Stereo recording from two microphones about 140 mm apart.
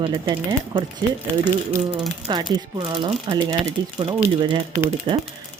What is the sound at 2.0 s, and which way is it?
Speech, 35° right (ahead or behind).